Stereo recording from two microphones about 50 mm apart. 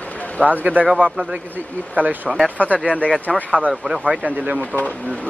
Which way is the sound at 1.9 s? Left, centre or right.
Right.